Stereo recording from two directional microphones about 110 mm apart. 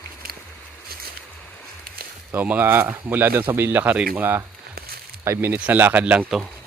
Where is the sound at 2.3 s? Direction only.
15° right (ahead or behind).